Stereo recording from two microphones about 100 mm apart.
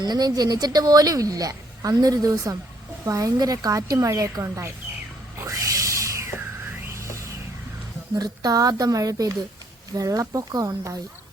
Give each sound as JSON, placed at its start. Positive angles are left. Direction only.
{"t": 0.0, "sound": "a woman's voice", "side_deg": -40}
{"t": 5.4, "sound": "a sound", "side_deg": -35}
{"t": 6.9, "sound": "music", "side_deg": -30}
{"t": 8.1, "sound": "a woman's voice", "side_deg": -40}